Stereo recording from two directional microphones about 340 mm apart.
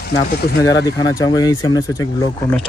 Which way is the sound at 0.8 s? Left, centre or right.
Centre.